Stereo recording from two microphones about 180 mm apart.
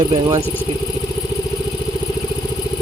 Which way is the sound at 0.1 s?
25° right (ahead or behind).